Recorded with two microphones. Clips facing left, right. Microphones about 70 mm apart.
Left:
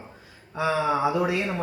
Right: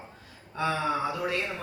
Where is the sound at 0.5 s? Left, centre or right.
Centre.